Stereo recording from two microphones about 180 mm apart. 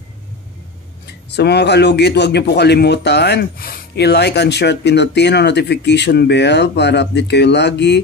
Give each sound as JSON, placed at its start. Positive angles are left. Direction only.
{"t": 1.3, "sound": "a man's voice", "side_deg": 70}